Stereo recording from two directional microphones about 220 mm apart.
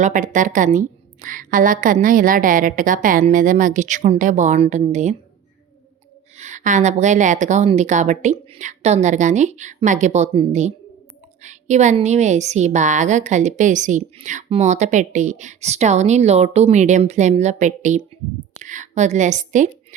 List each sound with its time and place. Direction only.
0.0 s a woman's voice: 35° right (ahead or behind)
6.3 s a woman's voice: 30° right (ahead or behind)